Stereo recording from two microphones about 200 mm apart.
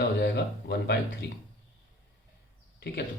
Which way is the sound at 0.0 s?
60° left (ahead or behind).